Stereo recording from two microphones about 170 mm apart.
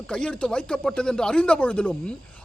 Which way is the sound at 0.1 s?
5° left (ahead or behind).